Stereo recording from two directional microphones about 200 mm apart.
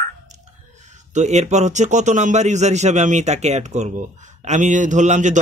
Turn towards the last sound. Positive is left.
turn(degrees=-35)  # may be behind; listen again after turning